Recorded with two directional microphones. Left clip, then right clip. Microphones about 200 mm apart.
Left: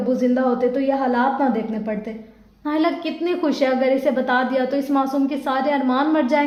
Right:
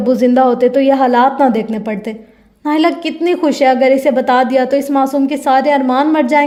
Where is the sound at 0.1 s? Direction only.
50° right (ahead or behind).